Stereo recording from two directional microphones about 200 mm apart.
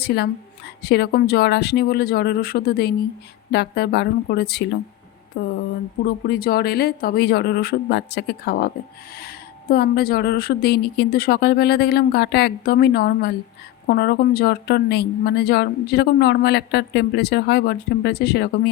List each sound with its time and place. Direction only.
0.0 s a woman's voice: 55° left (ahead or behind)
6.2 s a woman's voice: 50° left (ahead or behind)